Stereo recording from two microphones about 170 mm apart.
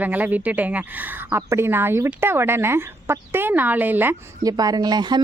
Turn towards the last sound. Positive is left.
turn(degrees=-25)  # may be behind; listen again after turning